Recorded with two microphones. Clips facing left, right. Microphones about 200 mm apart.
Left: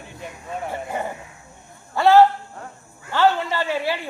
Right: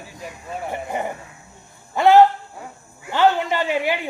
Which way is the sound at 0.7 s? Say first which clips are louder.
Right 3 dB; 15° right (ahead or behind).